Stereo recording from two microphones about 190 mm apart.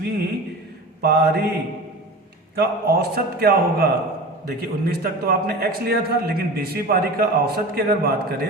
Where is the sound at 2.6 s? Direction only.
55° right (ahead or behind).